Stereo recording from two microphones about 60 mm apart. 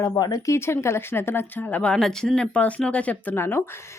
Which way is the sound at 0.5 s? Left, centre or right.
Left.